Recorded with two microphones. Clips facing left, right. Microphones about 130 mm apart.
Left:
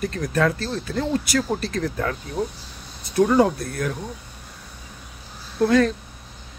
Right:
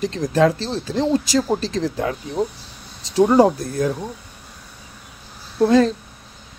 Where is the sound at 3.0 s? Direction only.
90° right.